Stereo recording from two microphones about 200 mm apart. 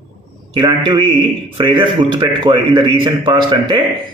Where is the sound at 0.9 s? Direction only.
25° right (ahead or behind).